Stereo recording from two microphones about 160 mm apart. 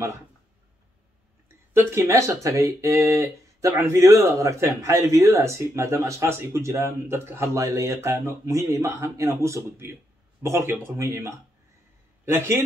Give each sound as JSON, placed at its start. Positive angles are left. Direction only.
{"t": 1.7, "sound": "speech", "side_deg": -15}